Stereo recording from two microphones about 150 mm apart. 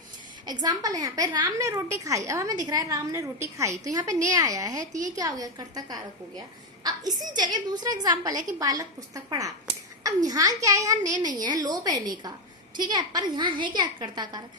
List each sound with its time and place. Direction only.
0.4 s a woman's voice: 25° right (ahead or behind)
4.9 s a woman's voice: 55° right (ahead or behind)
5.1 s a woman's voice: 25° right (ahead or behind)
6.8 s a sound: 25° right (ahead or behind)
7.3 s a woman's voice: 25° right (ahead or behind)